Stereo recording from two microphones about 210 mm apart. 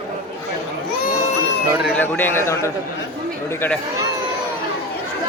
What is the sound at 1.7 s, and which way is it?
Speech, 5° right (ahead or behind).